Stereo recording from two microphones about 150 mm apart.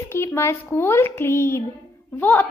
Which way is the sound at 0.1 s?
15° left (ahead or behind).